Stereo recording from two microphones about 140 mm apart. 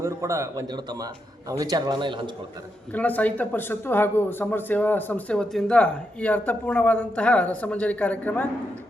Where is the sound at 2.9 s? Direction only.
10° left (ahead or behind).